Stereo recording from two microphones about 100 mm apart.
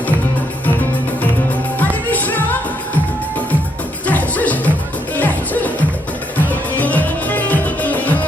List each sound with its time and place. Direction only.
1.8 s music: 15° left (ahead or behind)
4.0 s music: 15° left (ahead or behind)